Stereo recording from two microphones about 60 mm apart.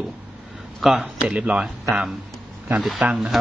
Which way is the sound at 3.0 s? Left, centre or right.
Right.